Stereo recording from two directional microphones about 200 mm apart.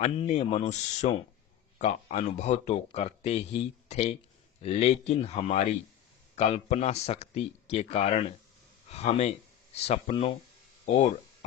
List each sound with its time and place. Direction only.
0.0 s a man's voice: 35° left (ahead or behind)